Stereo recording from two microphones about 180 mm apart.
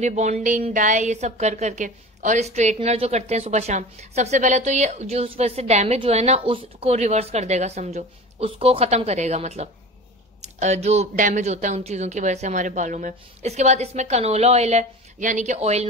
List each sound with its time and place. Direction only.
0.0 s a woman's voice: 40° right (ahead or behind)